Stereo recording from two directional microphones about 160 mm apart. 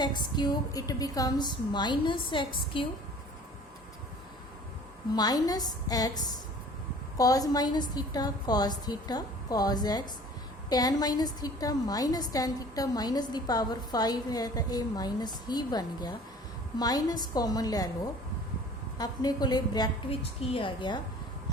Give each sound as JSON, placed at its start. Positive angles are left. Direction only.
{"t": 0.0, "sound": "a woman's voice", "side_deg": 25}
{"t": 5.1, "sound": "a woman's voice", "side_deg": 25}